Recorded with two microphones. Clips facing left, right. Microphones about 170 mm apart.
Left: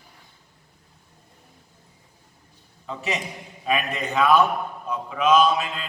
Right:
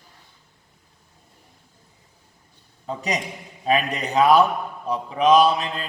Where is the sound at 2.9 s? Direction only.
35° right (ahead or behind).